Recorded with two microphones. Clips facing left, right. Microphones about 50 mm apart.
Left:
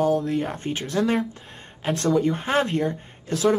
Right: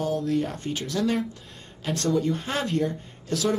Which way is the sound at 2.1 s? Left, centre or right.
Left.